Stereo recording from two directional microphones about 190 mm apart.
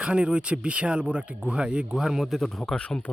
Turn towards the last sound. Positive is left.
turn(degrees=5)  # may be behind; listen again after turning